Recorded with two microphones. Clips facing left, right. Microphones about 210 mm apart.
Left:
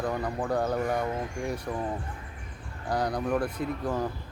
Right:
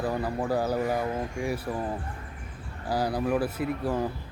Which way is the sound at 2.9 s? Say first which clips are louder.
Right 1 dB; 5° right (ahead or behind).